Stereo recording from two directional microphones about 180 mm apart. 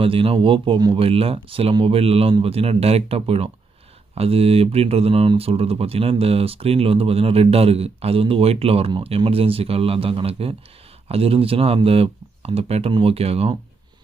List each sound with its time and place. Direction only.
0.0 s speech: 30° right (ahead or behind)